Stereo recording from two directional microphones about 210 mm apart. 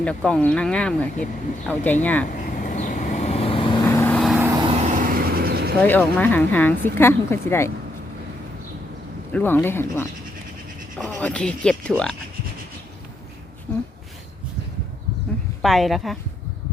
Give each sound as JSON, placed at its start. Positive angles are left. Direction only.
{"t": 0.0, "sound": "speech", "side_deg": 5}
{"t": 2.3, "sound": "vehicle", "side_deg": 40}
{"t": 3.8, "sound": "vehicle", "side_deg": 10}
{"t": 4.4, "sound": "vehicle", "side_deg": -15}
{"t": 5.8, "sound": "speech", "side_deg": 10}
{"t": 9.3, "sound": "speech", "side_deg": 10}
{"t": 15.6, "sound": "speech", "side_deg": 0}